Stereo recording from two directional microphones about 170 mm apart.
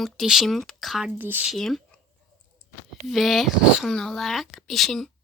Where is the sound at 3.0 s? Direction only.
Centre (ahead or behind).